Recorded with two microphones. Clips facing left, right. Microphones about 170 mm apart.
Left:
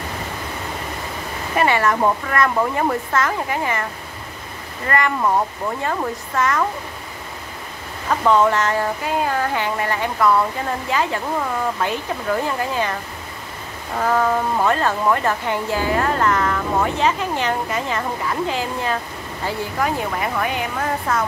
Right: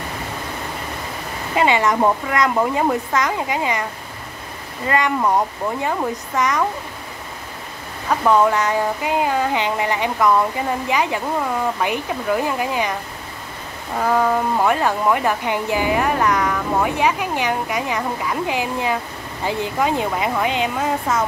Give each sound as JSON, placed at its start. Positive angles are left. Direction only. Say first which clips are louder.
{"t": 1.5, "sound": "speech", "louder": "right 1 dB", "side_deg": -20}
{"t": 4.8, "sound": "speech", "louder": "right 1 dB", "side_deg": -15}
{"t": 8.1, "sound": "speech", "louder": "even", "side_deg": -10}
{"t": 13.9, "sound": "speech", "louder": "right 1 dB", "side_deg": -5}